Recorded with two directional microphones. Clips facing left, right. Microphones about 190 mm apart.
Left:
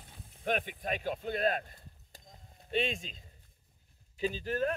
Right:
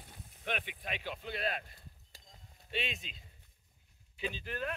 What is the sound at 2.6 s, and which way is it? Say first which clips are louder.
Speech: left 7 dB; 45° left (ahead or behind).